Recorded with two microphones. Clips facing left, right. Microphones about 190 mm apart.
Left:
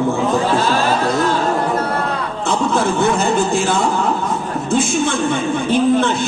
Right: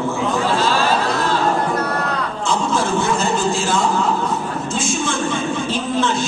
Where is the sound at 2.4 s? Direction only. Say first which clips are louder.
Left 3 dB; 60° left (ahead or behind).